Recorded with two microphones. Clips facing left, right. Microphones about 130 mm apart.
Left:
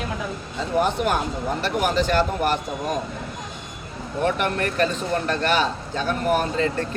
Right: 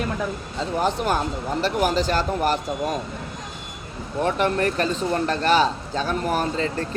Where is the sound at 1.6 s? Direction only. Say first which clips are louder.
Right 1 dB; 35° right (ahead or behind).